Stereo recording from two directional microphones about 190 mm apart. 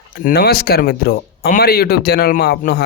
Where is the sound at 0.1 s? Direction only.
50° left (ahead or behind).